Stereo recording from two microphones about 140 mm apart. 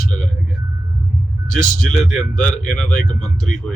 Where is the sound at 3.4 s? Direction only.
Centre (ahead or behind).